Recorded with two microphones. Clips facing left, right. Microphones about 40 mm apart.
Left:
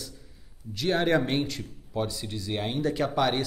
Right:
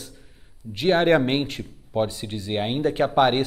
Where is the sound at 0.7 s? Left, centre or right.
Right.